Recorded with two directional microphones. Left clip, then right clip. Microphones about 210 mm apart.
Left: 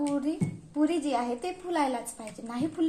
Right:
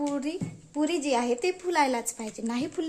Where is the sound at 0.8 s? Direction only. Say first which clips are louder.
Right 1 dB; 55° right (ahead or behind).